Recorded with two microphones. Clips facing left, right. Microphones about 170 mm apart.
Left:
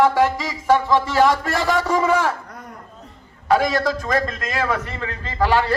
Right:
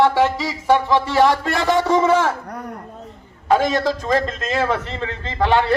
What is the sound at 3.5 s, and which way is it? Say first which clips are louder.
A man's voice: right 1 dB; 25° right (ahead or behind).